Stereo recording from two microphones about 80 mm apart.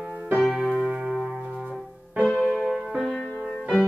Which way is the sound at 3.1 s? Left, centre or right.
Centre.